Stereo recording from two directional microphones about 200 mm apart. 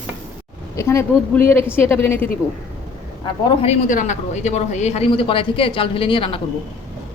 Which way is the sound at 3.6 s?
35° left (ahead or behind).